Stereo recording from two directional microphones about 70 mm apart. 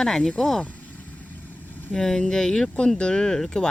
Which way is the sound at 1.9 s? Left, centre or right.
Centre.